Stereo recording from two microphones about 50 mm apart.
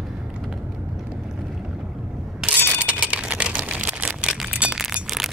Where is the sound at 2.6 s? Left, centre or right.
Right.